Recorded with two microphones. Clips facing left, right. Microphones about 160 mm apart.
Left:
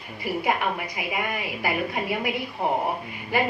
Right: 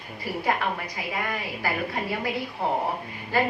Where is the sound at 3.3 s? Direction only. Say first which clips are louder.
Even; 15° left (ahead or behind).